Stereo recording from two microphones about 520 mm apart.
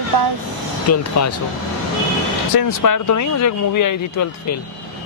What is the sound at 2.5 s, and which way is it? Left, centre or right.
Speech, left.